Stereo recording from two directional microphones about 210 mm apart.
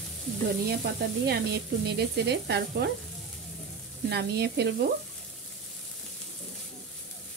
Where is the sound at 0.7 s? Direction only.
50° right (ahead or behind).